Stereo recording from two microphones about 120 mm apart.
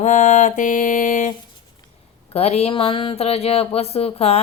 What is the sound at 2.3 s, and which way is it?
Speech, 60° left (ahead or behind).